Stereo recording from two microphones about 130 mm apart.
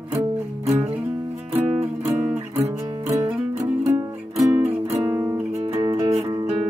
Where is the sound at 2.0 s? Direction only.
20° right (ahead or behind).